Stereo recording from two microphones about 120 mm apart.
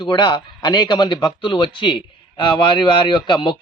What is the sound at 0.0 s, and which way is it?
A man's voice, 40° left (ahead or behind).